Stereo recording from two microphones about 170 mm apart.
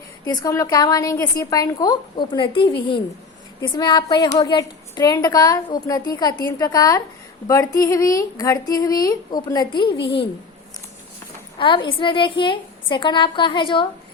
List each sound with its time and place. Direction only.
0.3 s a woman's voice: 20° left (ahead or behind)
11.5 s a woman's voice: 30° left (ahead or behind)